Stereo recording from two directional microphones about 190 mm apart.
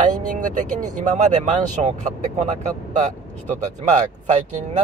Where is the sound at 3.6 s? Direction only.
40° right (ahead or behind).